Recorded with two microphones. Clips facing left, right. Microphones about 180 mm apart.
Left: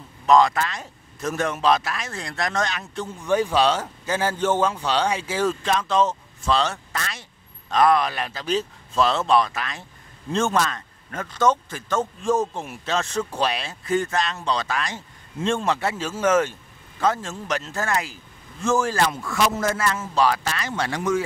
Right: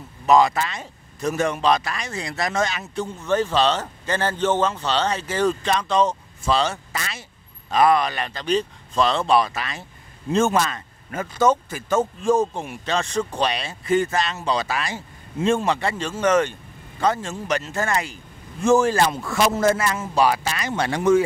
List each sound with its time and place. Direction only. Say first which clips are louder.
0.3 s speech: even; 5° right (ahead or behind)
3.2 s speech: left 1 dB; 10° left (ahead or behind)
18.6 s a man's voice: right 4 dB; 15° right (ahead or behind)
19.8 s speech: right 1 dB; 15° right (ahead or behind)